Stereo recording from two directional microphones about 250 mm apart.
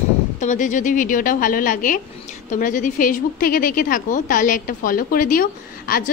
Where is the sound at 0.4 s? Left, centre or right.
Left.